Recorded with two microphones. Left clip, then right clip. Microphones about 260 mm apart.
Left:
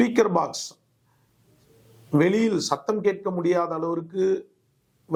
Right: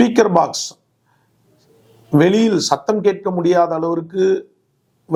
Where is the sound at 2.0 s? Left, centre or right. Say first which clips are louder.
Right 7 dB; left.